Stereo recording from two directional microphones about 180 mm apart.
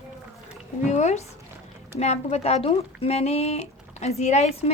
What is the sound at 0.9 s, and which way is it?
Speech, 40° left (ahead or behind).